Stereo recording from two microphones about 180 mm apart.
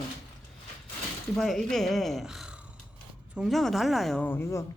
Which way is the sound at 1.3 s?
Centre (ahead or behind).